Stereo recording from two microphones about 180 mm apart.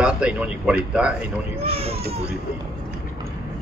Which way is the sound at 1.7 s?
35° right (ahead or behind).